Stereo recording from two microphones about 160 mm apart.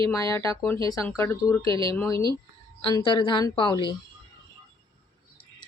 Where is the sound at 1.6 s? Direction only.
30° right (ahead or behind).